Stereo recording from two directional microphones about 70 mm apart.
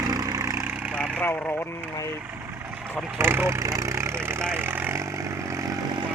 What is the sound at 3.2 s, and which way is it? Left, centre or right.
Speech, right.